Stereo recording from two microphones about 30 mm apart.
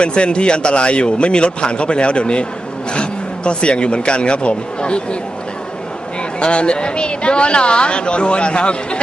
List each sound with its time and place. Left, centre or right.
0.0 s speech: left
6.4 s speech: left